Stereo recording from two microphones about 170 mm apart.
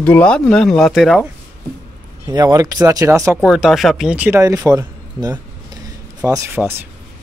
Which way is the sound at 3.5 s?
Centre (ahead or behind).